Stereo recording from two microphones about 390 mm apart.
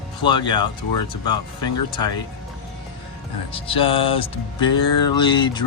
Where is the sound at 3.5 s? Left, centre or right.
Centre.